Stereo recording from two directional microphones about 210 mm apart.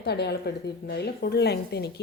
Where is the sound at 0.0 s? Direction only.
50° left (ahead or behind).